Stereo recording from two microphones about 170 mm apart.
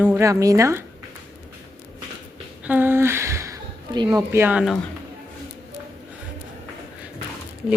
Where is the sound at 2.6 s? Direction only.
10° right (ahead or behind).